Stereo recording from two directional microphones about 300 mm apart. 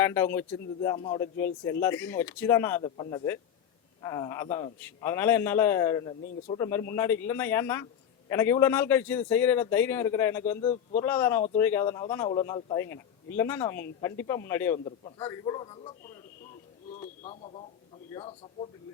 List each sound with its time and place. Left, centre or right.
0.0 s a man's voice: centre
10.6 s a man's voice: left
11.0 s speech: centre
16.9 s bird: left
18.1 s speech: centre